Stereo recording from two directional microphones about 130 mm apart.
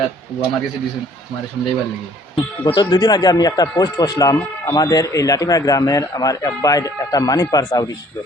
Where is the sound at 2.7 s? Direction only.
30° left (ahead or behind).